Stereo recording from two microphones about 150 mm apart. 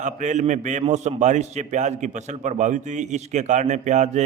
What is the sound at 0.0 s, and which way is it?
A man's voice, 55° right (ahead or behind).